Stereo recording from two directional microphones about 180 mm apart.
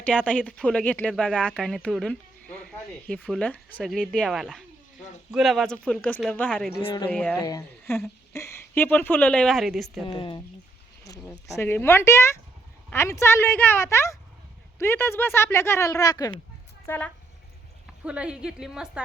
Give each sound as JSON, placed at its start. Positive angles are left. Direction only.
{"t": 0.0, "sound": "speech", "side_deg": 5}
{"t": 6.8, "sound": "speech", "side_deg": 30}
{"t": 7.1, "sound": "speech", "side_deg": 5}
{"t": 10.1, "sound": "speech", "side_deg": 25}
{"t": 11.4, "sound": "speech", "side_deg": 15}
{"t": 18.0, "sound": "speech", "side_deg": -5}